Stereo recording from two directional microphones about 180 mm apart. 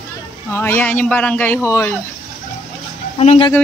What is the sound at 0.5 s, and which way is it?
A man's voice, 10° left (ahead or behind).